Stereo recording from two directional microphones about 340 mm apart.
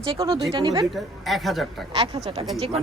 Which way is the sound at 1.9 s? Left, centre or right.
Centre.